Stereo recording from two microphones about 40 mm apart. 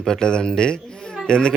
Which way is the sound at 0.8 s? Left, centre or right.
Centre.